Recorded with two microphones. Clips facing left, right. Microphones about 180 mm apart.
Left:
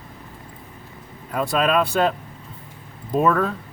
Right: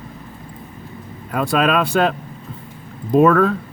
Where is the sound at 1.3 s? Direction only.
75° right (ahead or behind).